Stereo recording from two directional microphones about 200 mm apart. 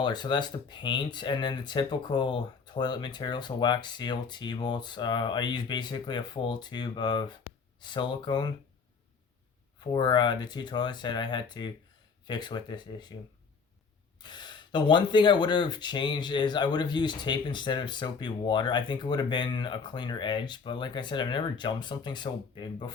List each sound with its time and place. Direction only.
0.0 s speech: 20° left (ahead or behind)
9.8 s speech: 20° left (ahead or behind)
14.2 s speech: 20° left (ahead or behind)